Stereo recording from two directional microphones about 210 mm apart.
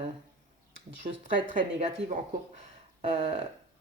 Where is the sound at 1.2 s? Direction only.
40° right (ahead or behind).